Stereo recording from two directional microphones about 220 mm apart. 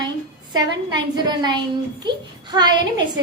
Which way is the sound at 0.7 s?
20° right (ahead or behind).